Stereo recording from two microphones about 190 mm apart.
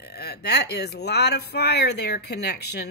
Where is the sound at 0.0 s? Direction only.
60° left (ahead or behind).